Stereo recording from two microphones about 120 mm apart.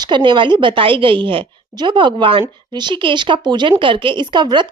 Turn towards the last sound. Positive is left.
turn(degrees=-40)  # may be behind; listen again after turning